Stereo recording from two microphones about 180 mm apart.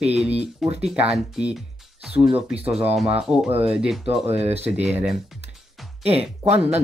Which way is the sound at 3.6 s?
5° right (ahead or behind).